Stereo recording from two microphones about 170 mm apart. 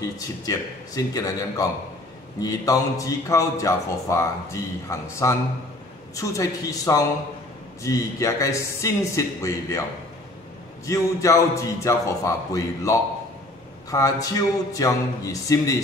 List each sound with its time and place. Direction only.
0.0 s a man's voice: 20° left (ahead or behind)
10.9 s a man's voice: 20° left (ahead or behind)